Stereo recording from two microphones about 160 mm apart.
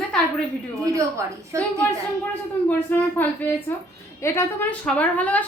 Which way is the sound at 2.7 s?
10° left (ahead or behind).